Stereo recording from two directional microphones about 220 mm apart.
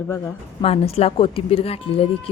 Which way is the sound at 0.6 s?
25° left (ahead or behind).